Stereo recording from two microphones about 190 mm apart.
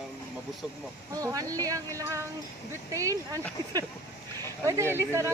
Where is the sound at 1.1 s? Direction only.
20° right (ahead or behind).